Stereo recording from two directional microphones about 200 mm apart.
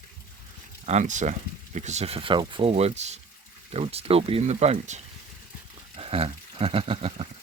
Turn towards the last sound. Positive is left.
turn(degrees=-30)  # may be behind; listen again after turning